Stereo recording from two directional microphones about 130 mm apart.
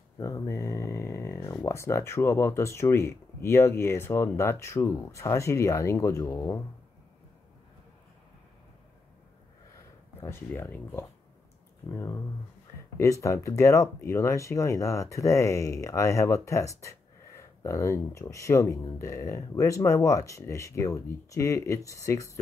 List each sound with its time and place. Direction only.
0.2 s speech: 20° left (ahead or behind)
10.2 s speech: 20° left (ahead or behind)